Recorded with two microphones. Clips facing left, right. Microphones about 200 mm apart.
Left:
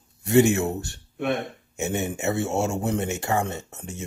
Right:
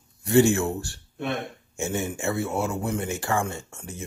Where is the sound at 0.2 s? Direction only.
20° left (ahead or behind).